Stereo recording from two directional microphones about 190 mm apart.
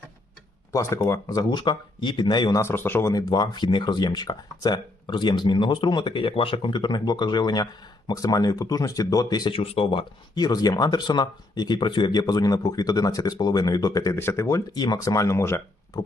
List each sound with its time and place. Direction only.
0.7 s speech: 15° left (ahead or behind)